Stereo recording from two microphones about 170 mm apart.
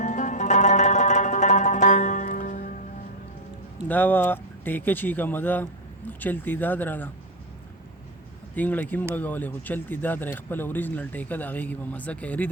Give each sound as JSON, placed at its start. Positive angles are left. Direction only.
{"t": 0.0, "sound": "music", "side_deg": 45}
{"t": 3.8, "sound": "a man's voice", "side_deg": 10}
{"t": 8.5, "sound": "a man's voice", "side_deg": 10}